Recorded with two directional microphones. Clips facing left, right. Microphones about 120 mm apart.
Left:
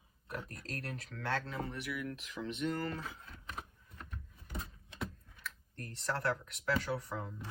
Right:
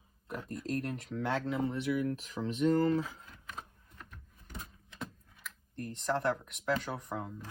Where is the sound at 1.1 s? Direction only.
20° right (ahead or behind).